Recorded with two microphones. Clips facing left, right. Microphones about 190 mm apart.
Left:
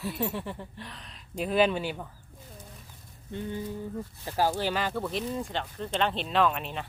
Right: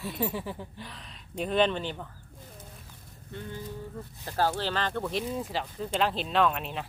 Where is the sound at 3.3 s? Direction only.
20° left (ahead or behind).